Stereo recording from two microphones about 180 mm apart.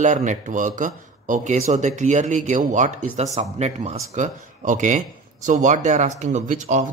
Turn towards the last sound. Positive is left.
turn(degrees=-45)  # may be behind; listen again after turning